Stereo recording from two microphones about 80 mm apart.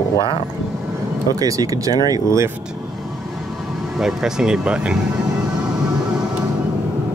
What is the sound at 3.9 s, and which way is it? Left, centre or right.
Speech, centre.